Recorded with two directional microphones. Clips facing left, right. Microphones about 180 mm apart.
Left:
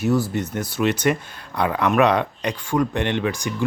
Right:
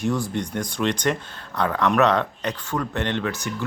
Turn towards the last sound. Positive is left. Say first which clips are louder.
# left 3 dB
turn(degrees=15)  # may be behind; listen again after turning